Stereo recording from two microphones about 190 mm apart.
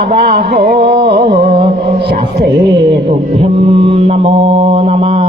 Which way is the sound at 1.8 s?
55° right (ahead or behind).